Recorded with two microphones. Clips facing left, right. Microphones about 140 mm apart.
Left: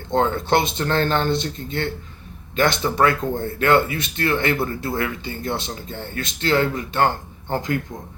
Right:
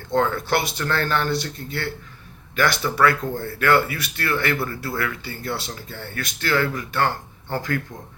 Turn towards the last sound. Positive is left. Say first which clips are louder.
# left 2 dB
turn(degrees=20)  # may be behind; listen again after turning